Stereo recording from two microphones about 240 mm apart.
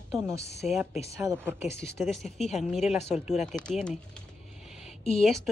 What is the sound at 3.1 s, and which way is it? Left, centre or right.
Speech, left.